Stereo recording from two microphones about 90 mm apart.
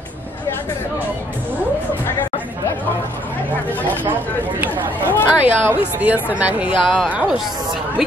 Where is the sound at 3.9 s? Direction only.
20° right (ahead or behind).